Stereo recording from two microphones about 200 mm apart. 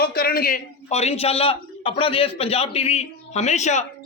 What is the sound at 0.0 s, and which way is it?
A man's voice, 50° left (ahead or behind).